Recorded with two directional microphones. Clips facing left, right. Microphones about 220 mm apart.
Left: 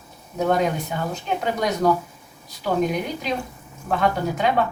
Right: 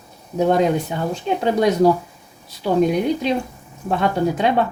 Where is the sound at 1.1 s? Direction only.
30° right (ahead or behind).